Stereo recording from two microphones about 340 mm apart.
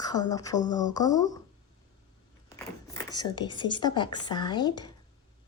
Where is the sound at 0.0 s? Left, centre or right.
Centre.